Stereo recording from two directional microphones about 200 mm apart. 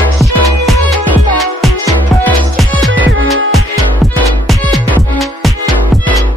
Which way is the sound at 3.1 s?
80° right.